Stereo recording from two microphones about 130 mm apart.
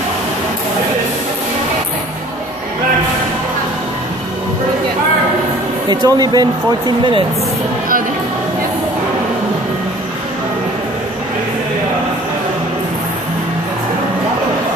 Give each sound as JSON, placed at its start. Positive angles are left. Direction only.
{"t": 5.9, "sound": "speech", "side_deg": -30}